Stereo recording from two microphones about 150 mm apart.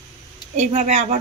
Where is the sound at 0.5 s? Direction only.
50° right (ahead or behind).